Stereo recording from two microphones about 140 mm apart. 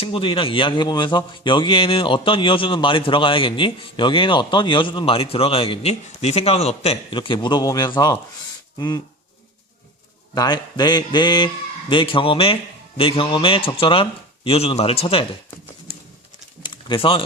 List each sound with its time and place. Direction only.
0.0 s a man's voice: 40° left (ahead or behind)
10.3 s a man's voice: 30° left (ahead or behind)
16.6 s a sound: 35° left (ahead or behind)